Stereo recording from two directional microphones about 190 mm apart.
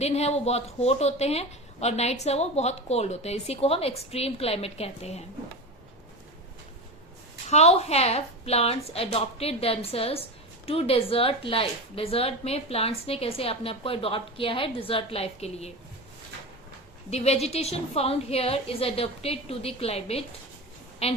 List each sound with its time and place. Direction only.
0.0 s a woman's voice: 35° left (ahead or behind)
7.5 s a woman's voice: 35° left (ahead or behind)
17.1 s a woman's voice: 35° left (ahead or behind)